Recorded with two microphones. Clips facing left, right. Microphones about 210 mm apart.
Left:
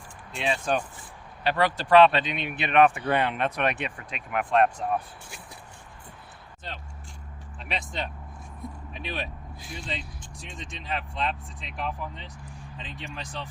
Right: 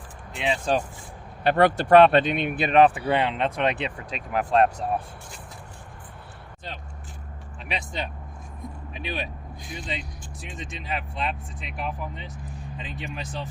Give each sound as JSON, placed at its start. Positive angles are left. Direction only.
{"t": 0.3, "sound": "speech", "side_deg": -20}
{"t": 0.6, "sound": "speech", "side_deg": -35}
{"t": 1.5, "sound": "speech", "side_deg": -55}
{"t": 2.6, "sound": "speech", "side_deg": -35}
{"t": 3.1, "sound": "speech", "side_deg": -20}
{"t": 4.1, "sound": "speech", "side_deg": -35}
{"t": 7.7, "sound": "speech", "side_deg": 0}